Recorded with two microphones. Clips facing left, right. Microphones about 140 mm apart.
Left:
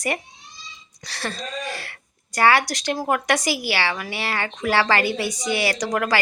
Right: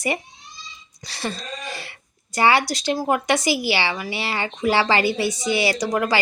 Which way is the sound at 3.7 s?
15° right (ahead or behind).